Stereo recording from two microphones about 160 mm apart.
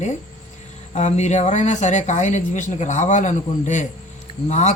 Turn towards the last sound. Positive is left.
turn(degrees=45)  # may be behind; listen again after turning